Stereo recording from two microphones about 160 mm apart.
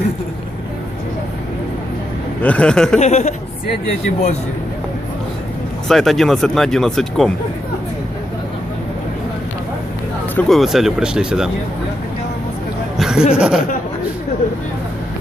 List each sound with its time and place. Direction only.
2.4 s speech: 10° left (ahead or behind)
3.0 s a woman's voice: 45° left (ahead or behind)
5.9 s speech: centre (ahead or behind)
10.3 s speech: centre (ahead or behind)
13.0 s a sound: 5° right (ahead or behind)
13.3 s speech: 5° right (ahead or behind)